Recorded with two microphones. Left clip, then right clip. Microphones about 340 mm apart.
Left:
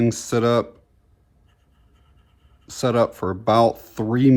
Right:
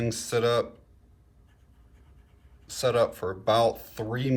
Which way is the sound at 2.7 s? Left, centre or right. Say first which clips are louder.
Left 4 dB; centre.